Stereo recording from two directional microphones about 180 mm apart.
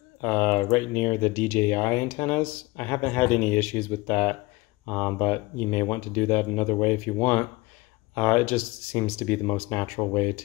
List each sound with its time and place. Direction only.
0.2 s speech: 10° left (ahead or behind)